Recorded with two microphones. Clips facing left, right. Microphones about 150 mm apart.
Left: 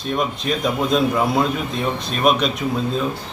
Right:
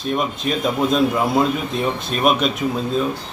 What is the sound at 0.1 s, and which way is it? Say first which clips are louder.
A man's voice: even; centre (ahead or behind).